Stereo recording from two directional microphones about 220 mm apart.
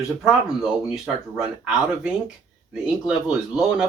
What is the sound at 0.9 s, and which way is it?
Speech, 5° right (ahead or behind).